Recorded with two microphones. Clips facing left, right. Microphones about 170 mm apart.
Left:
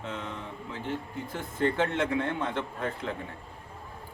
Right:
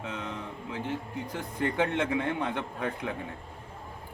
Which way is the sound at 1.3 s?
15° right (ahead or behind).